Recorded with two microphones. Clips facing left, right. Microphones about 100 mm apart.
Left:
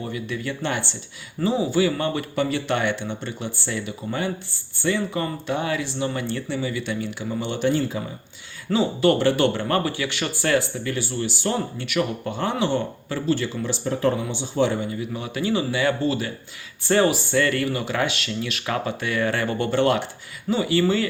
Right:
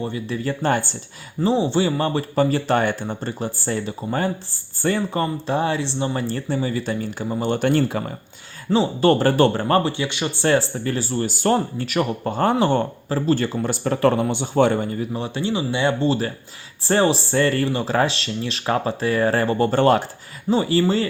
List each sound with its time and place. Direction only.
0.0 s speech: 30° right (ahead or behind)
1.4 s speech: 30° right (ahead or behind); by 8.1 s 60° right (ahead or behind)
8.7 s speech: 35° right (ahead or behind)
13.8 s speech: 65° right (ahead or behind); by 15.0 s 50° right (ahead or behind)
15.1 s speech: 30° right (ahead or behind)